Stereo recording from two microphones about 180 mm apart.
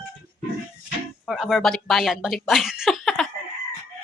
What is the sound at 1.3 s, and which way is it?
Speech, centre (ahead or behind).